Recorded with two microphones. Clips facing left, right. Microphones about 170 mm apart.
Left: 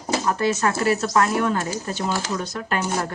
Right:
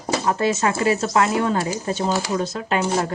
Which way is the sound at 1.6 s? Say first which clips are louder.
Right 3 dB; 10° right (ahead or behind).